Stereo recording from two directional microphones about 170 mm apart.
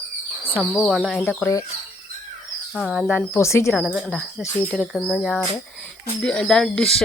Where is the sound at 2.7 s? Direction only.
Centre (ahead or behind).